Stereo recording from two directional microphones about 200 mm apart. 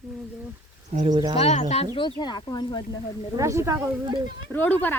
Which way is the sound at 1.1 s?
20° right (ahead or behind).